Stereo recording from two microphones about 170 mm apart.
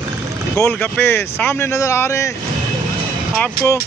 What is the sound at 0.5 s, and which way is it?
Speech, 15° left (ahead or behind).